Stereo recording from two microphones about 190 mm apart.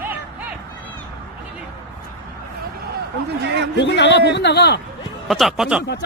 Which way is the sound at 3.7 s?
65° left (ahead or behind).